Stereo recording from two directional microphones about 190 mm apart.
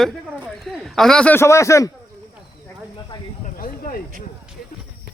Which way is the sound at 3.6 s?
50° left (ahead or behind).